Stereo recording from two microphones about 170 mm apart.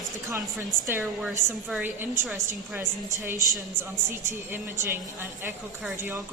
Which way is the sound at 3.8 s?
15° right (ahead or behind).